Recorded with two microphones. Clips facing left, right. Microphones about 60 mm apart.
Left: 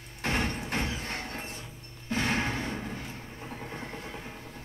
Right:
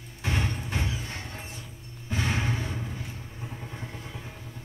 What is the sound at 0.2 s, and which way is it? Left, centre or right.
Vehicle, left.